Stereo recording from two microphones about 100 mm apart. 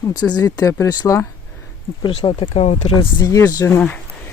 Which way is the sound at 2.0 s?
60° left (ahead or behind).